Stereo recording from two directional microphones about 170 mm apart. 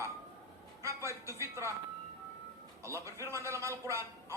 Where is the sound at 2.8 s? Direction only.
15° right (ahead or behind).